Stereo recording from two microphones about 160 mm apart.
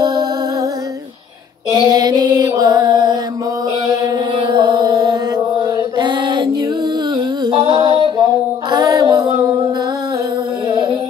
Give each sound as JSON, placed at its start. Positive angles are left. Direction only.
{"t": 0.0, "sound": "music", "side_deg": -25}
{"t": 1.7, "sound": "mantra", "side_deg": -20}
{"t": 7.2, "sound": "music", "side_deg": -30}